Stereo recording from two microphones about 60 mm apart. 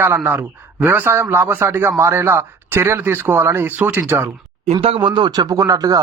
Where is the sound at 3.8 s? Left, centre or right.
Right.